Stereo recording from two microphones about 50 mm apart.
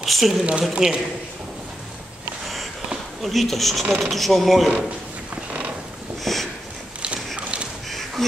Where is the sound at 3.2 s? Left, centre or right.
Centre.